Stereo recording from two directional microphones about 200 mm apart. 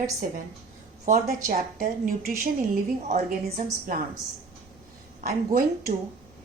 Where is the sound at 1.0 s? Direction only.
40° right (ahead or behind).